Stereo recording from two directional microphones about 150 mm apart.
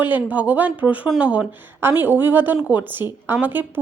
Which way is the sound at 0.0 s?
10° right (ahead or behind).